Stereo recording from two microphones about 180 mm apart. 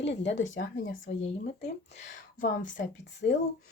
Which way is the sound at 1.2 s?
40° left (ahead or behind).